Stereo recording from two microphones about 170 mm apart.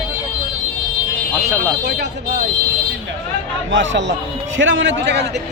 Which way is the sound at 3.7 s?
90° right.